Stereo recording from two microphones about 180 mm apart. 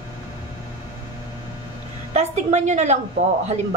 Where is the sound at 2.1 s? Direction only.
35° right (ahead or behind).